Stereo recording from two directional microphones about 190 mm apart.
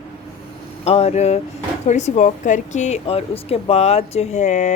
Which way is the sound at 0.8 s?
35° left (ahead or behind).